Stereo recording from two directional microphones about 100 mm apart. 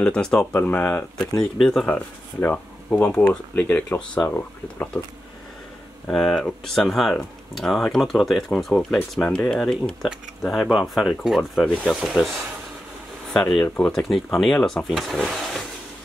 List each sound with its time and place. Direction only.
0.0 s speech: 10° left (ahead or behind)
1.6 s speech: 5° left (ahead or behind)
1.9 s speech: 15° left (ahead or behind)
6.0 s speech: 5° left (ahead or behind)
11.6 s speech: 15° left (ahead or behind)
11.9 s speech: centre (ahead or behind)
13.3 s speech: 10° left (ahead or behind)